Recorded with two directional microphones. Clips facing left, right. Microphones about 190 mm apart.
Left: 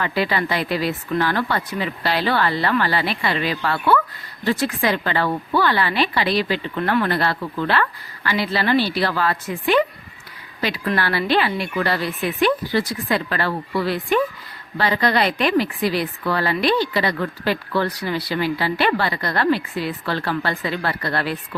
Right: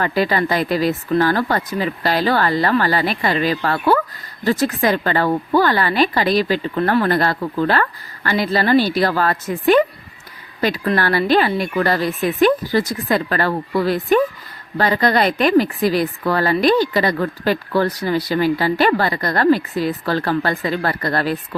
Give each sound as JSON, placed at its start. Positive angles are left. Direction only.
{"t": 0.0, "sound": "a woman's voice", "side_deg": -45}